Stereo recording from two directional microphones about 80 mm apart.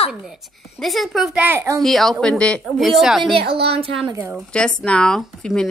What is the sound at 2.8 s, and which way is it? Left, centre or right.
Speech, centre.